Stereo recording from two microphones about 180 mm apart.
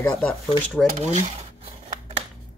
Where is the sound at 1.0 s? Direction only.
40° right (ahead or behind).